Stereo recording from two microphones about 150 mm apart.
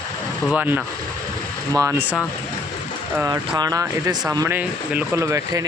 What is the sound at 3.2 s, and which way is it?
Speech, 20° right (ahead or behind).